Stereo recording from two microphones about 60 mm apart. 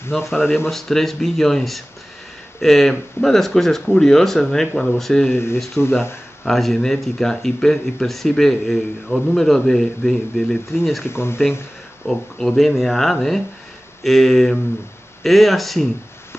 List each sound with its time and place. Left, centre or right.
0.1 s speech: centre
5.3 s speech: left
6.4 s speech: centre
11.1 s speech: left
12.1 s speech: centre